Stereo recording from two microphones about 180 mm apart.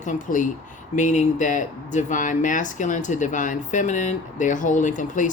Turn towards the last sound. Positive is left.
turn(degrees=45)  # may be behind; listen again after turning